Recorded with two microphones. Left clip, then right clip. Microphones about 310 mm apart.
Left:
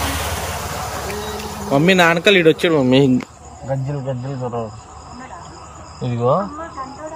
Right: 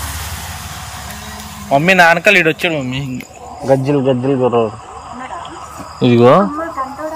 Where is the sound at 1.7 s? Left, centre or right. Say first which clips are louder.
Right 5 dB; centre.